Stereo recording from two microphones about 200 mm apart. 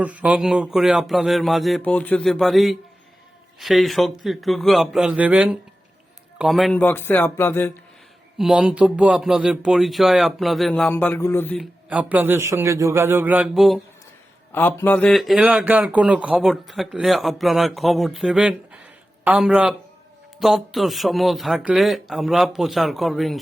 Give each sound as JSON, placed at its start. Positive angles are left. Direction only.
{"t": 0.0, "sound": "speech", "side_deg": -5}
{"t": 8.4, "sound": "speech", "side_deg": 0}